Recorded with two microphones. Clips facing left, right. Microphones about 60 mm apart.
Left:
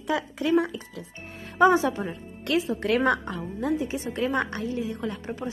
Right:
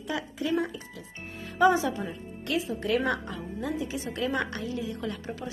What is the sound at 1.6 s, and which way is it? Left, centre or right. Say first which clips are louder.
Speech: left 3 dB; left.